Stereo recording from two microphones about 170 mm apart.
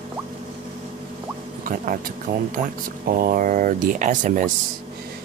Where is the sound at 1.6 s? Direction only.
55° right (ahead or behind).